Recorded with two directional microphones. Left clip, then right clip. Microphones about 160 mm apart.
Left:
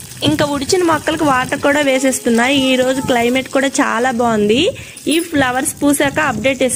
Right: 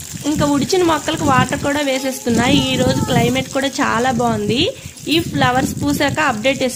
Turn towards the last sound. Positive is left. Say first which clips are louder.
# left 2 dB
turn(degrees=25)  # may be behind; listen again after turning